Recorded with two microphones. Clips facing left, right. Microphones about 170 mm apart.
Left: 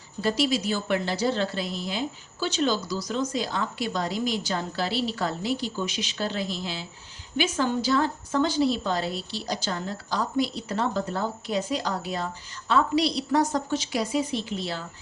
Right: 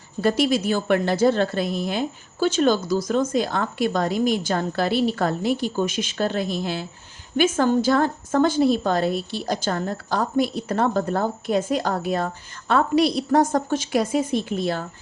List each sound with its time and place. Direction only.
0.2 s a woman's voice: 55° right (ahead or behind)